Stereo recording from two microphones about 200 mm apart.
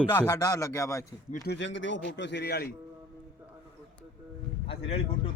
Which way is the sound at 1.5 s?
65° left (ahead or behind).